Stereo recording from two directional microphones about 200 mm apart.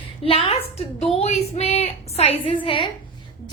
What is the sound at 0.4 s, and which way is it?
A woman's voice, 30° left (ahead or behind).